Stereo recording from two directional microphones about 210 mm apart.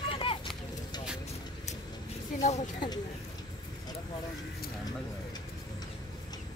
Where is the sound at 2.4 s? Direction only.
35° left (ahead or behind).